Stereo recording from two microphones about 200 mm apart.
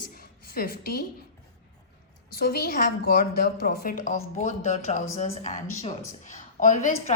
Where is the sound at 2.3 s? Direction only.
50° left (ahead or behind).